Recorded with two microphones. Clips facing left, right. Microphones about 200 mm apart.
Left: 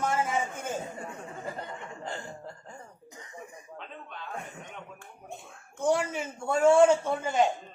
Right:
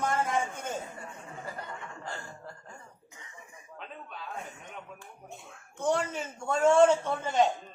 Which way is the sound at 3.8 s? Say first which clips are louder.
Right 1 dB; 5° right (ahead or behind).